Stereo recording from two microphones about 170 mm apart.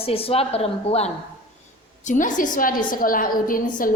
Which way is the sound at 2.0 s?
50° left (ahead or behind).